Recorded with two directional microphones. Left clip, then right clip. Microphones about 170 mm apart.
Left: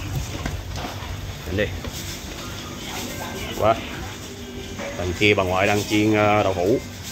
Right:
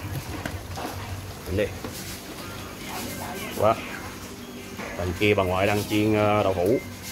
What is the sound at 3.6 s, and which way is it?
Speech, 10° right (ahead or behind).